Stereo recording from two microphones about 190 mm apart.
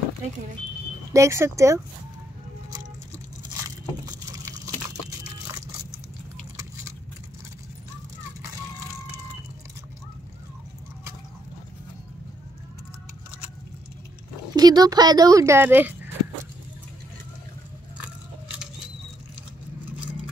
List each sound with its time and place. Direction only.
1.1 s speech: 15° right (ahead or behind)
4.0 s a sound: 20° right (ahead or behind)
14.5 s a woman's voice: 20° right (ahead or behind)